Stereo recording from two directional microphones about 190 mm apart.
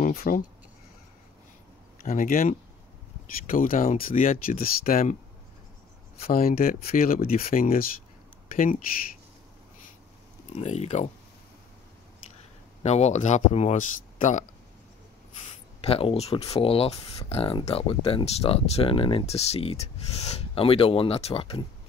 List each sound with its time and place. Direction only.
0.0 s speech: 50° left (ahead or behind)
2.0 s speech: 45° left (ahead or behind)
6.1 s speech: 50° left (ahead or behind)
10.5 s speech: 35° left (ahead or behind)
12.8 s speech: 35° left (ahead or behind)
15.4 s speech: 30° left (ahead or behind)